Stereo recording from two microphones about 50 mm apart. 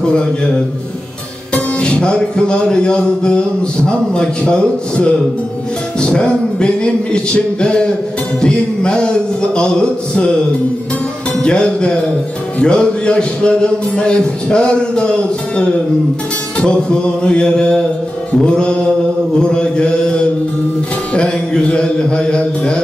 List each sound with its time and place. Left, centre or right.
0.0 s a man's voice: centre
1.5 s music: centre
8.4 s speech: centre
11.4 s music: centre